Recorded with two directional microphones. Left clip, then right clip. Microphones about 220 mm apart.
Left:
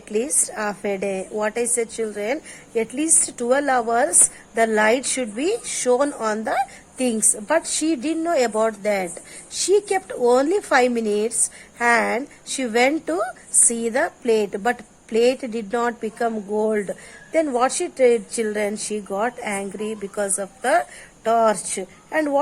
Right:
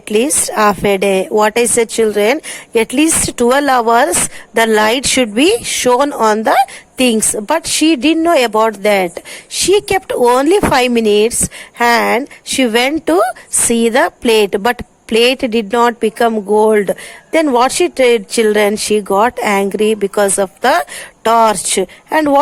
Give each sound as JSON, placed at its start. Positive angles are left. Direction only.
{"t": 0.1, "sound": "speech", "side_deg": -35}